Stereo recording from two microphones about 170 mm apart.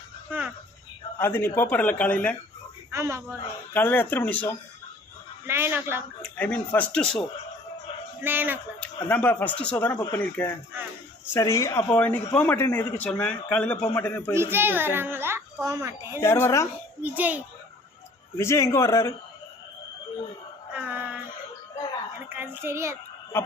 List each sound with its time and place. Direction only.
0.3 s speech: 10° right (ahead or behind)
1.2 s a man's voice: 10° left (ahead or behind)
2.9 s a child's voice: 15° right (ahead or behind)
3.8 s a man's voice: 10° left (ahead or behind)
5.5 s a child's voice: 15° right (ahead or behind)
6.2 s a man's voice: 10° left (ahead or behind)
8.2 s a child's voice: 10° right (ahead or behind)
8.8 s a man's voice: 10° left (ahead or behind)
14.3 s a child's voice: 15° right (ahead or behind)
16.2 s a man's voice: 15° left (ahead or behind)
17.0 s a child's voice: 10° right (ahead or behind)
18.3 s a man's voice: 15° left (ahead or behind)
20.7 s music: 10° right (ahead or behind)
22.4 s a child's voice: 15° right (ahead or behind)